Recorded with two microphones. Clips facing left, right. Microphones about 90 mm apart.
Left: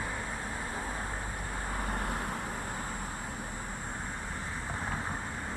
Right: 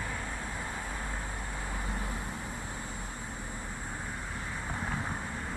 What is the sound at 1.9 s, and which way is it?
Vehicle, 60° left (ahead or behind).